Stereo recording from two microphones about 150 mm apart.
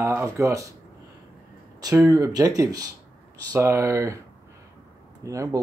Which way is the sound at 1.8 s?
25° right (ahead or behind).